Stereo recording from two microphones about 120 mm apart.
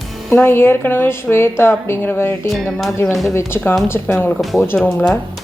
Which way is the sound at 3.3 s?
20° left (ahead or behind).